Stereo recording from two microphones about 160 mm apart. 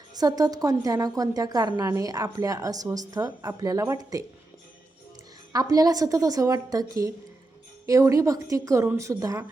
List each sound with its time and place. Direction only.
0.2 s a woman's voice: 25° right (ahead or behind)
5.5 s a woman's voice: 20° right (ahead or behind)
7.9 s a woman's voice: 20° right (ahead or behind)